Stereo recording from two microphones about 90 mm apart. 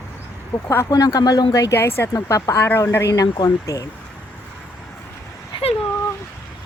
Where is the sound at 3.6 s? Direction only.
40° left (ahead or behind).